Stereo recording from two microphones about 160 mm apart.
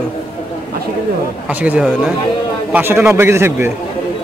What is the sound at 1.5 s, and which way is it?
Speech, 10° right (ahead or behind).